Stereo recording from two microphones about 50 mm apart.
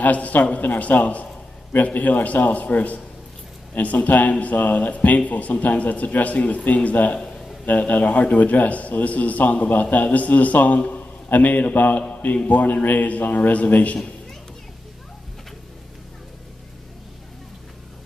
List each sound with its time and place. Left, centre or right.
0.0 s a man's voice: left